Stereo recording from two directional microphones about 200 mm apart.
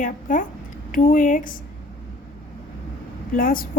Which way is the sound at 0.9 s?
45° left (ahead or behind).